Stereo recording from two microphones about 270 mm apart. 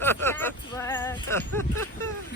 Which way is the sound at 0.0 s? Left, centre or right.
Centre.